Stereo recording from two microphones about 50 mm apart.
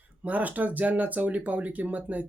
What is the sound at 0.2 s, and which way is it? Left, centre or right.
Speech, right.